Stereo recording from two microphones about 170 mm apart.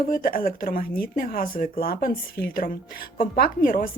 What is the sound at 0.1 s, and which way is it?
Speech, 55° left (ahead or behind).